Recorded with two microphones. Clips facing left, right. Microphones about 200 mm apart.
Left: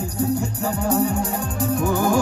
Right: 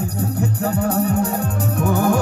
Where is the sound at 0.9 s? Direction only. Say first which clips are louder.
Left 1 dB; 60° right (ahead or behind).